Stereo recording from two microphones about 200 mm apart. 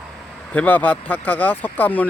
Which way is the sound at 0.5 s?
10° left (ahead or behind).